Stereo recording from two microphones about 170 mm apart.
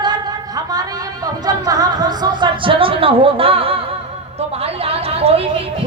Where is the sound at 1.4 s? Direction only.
20° right (ahead or behind).